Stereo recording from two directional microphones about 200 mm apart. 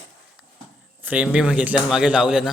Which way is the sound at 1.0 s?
5° right (ahead or behind).